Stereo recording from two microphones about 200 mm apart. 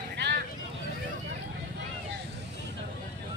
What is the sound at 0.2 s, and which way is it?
Vehicle, 60° right (ahead or behind).